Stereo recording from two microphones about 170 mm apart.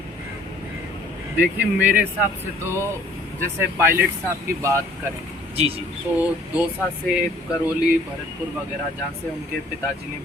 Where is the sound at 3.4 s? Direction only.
15° right (ahead or behind).